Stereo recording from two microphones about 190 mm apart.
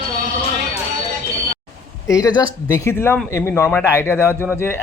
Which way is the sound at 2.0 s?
15° left (ahead or behind).